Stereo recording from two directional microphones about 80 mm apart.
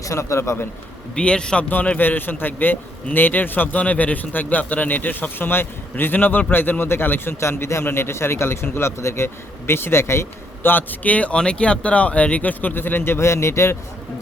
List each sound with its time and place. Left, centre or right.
0.0 s a man's voice: left
1.1 s a man's voice: centre; by 13.7 s left